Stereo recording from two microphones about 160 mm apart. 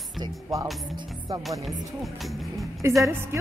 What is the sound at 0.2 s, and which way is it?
Speech, 25° right (ahead or behind).